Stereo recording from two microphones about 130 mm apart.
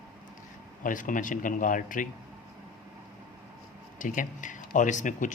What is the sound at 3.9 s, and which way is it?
Speech, 90° left.